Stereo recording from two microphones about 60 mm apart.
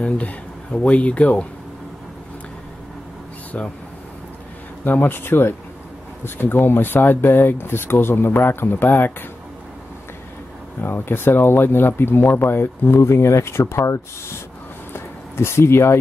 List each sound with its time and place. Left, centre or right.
0.0 s speech: left
3.5 s speech: left
4.8 s speech: left
10.8 s speech: left
14.9 s a sound: left